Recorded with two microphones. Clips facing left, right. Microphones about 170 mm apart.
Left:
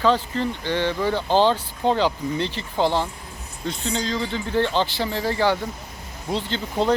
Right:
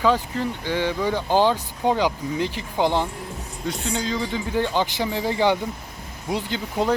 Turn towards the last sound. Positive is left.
turn(degrees=-10)  # may be behind; listen again after turning